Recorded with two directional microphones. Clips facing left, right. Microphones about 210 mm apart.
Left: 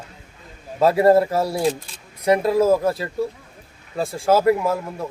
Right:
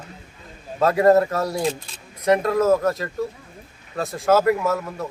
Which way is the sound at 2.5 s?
10° left (ahead or behind).